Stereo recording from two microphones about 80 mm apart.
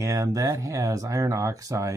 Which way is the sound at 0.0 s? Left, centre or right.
Right.